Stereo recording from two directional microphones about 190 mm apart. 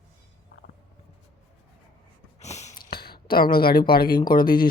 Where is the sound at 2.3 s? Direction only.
35° left (ahead or behind).